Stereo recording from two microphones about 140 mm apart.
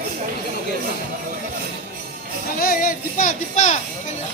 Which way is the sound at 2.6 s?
85° left.